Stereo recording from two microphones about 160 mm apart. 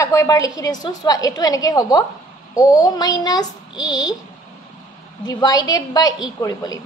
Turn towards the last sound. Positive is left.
turn(degrees=20)  # may be behind; listen again after turning